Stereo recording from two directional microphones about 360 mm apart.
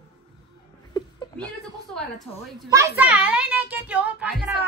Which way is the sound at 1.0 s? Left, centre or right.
Centre.